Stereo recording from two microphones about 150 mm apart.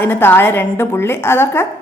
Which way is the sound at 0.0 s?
15° left (ahead or behind).